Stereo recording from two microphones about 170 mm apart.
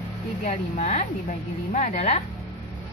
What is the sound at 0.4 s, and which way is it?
A woman's voice, 50° left (ahead or behind).